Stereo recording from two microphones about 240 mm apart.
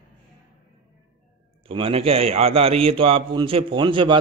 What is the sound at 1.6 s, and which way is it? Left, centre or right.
A man's voice, right.